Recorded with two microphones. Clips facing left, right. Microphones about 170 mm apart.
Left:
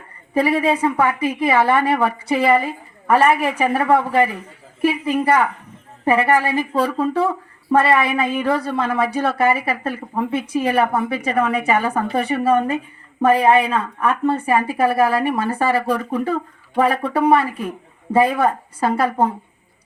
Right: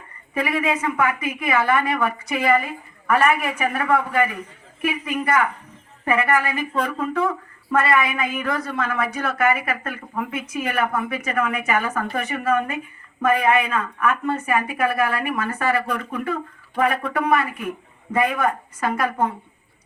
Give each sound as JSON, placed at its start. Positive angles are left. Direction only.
{"t": 0.3, "sound": "a woman's voice", "side_deg": 30}